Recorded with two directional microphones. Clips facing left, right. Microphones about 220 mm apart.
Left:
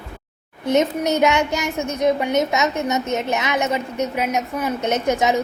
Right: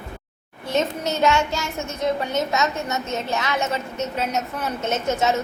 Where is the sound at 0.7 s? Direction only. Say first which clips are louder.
Left 5 dB; 20° left (ahead or behind).